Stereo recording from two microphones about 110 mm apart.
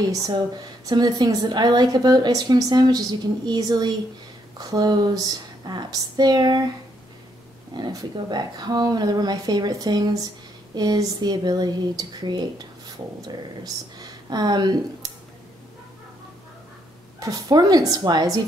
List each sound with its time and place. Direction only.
0.8 s a woman's voice: 40° right (ahead or behind)
7.7 s a woman's voice: 40° right (ahead or behind)
17.2 s a woman's voice: 30° right (ahead or behind)